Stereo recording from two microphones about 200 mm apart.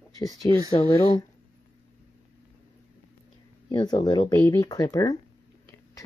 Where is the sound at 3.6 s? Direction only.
20° left (ahead or behind).